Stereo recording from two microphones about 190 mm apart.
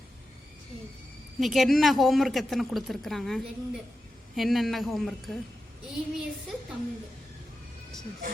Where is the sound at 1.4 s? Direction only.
Centre (ahead or behind).